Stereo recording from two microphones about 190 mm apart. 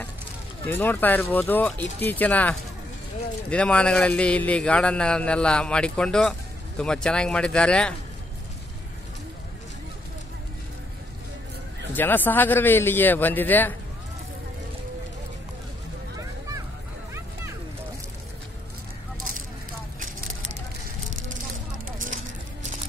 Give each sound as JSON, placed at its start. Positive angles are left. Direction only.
{"t": 0.7, "sound": "a man's voice", "side_deg": 10}
{"t": 11.9, "sound": "a man's voice", "side_deg": 10}
{"t": 20.0, "sound": "vehicle", "side_deg": -45}
{"t": 21.8, "sound": "a sound", "side_deg": -45}